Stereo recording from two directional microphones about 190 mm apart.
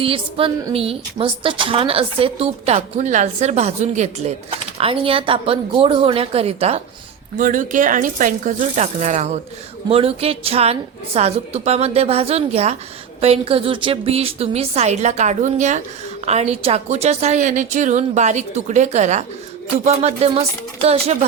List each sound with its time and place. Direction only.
0.0 s a woman's voice: 30° right (ahead or behind)
7.3 s a woman's voice: 40° right (ahead or behind)